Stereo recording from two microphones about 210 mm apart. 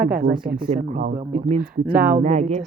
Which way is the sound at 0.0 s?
50° right (ahead or behind).